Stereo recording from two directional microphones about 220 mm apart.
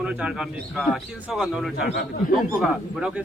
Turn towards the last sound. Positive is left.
turn(degrees=0)  # may be behind; listen again after turning